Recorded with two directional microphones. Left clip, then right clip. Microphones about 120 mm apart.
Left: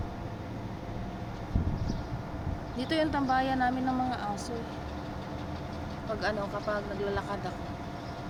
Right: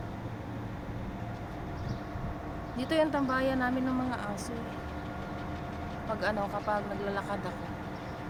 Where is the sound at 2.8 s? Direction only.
10° right (ahead or behind).